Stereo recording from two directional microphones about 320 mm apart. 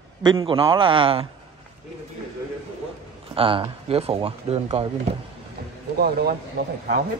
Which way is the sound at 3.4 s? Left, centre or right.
Centre.